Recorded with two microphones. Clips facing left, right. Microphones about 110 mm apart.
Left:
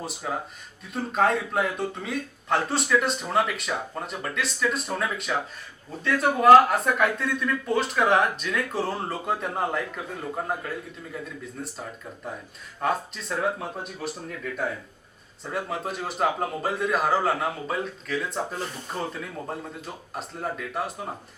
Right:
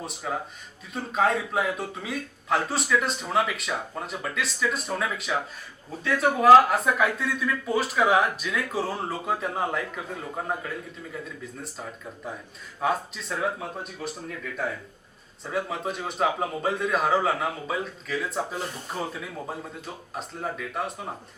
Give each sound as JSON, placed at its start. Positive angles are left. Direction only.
{"t": 0.0, "sound": "speech", "side_deg": 0}
{"t": 15.4, "sound": "speech", "side_deg": 0}